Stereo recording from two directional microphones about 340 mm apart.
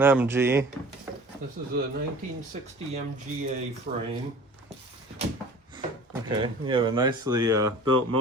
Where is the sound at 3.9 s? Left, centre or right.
Right.